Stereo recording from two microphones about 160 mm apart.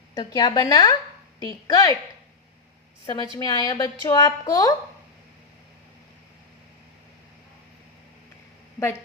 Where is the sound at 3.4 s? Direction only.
25° left (ahead or behind).